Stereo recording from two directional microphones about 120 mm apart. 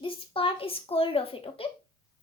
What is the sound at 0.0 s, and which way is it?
Speech, 50° left (ahead or behind).